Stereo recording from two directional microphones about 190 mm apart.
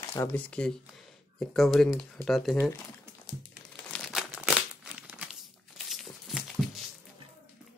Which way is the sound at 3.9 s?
Centre (ahead or behind).